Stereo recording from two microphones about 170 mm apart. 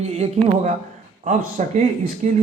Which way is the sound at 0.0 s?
40° right (ahead or behind).